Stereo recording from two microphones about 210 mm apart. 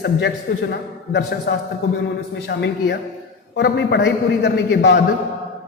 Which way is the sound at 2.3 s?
55° left (ahead or behind).